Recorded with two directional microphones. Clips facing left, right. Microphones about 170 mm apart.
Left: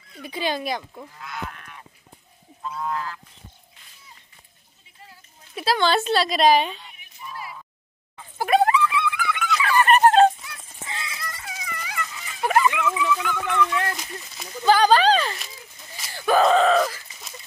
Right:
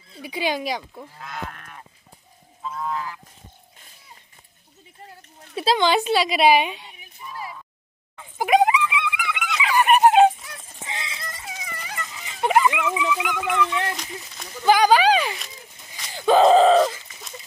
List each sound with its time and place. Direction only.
0.2 s a woman's voice: 10° right (ahead or behind)
1.2 s goose: 45° right (ahead or behind)
2.6 s goose: centre (ahead or behind)
5.6 s a woman's voice: 20° right (ahead or behind)
8.4 s dog: 15° right (ahead or behind)
10.9 s a sound: 20° right (ahead or behind)
12.1 s dog: 20° right (ahead or behind)
14.7 s a woman's voice: 10° right (ahead or behind)
16.1 s groan: 20° right (ahead or behind)